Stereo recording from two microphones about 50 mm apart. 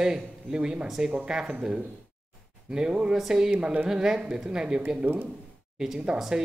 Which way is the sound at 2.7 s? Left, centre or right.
Centre.